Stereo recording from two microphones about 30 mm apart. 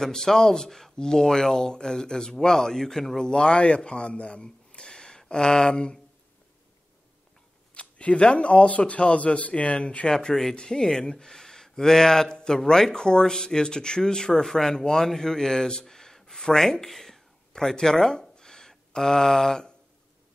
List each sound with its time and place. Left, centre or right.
0.0 s speech: centre
0.9 s speech: left
3.3 s speech: left
7.7 s speech: left
10.5 s speech: left
14.4 s speech: centre
16.8 s a sound: centre
17.6 s speech: centre
18.4 s a sound: centre